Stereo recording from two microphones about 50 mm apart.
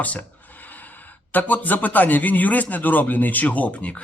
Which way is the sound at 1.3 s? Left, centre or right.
Left.